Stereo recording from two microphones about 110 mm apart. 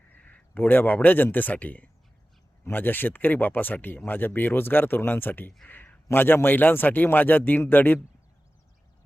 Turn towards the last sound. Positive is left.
turn(degrees=15)  # may be behind; listen again after turning